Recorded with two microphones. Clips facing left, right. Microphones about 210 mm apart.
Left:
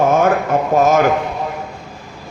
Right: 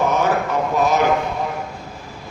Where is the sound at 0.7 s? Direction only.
45° left (ahead or behind).